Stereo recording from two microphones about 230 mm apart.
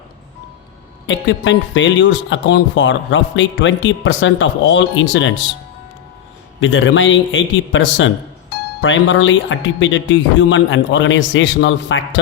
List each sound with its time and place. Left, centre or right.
1.0 s speech: left
6.6 s a man's voice: left